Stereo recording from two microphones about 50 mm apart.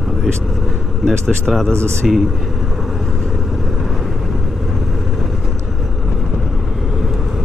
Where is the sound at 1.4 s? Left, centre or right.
Centre.